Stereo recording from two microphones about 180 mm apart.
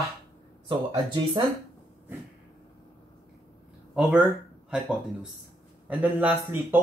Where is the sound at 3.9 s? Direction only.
5° right (ahead or behind).